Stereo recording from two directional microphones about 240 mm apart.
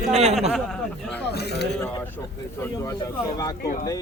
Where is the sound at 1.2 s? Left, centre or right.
Left.